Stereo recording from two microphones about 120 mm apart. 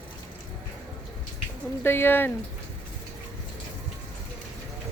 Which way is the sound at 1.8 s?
20° left (ahead or behind).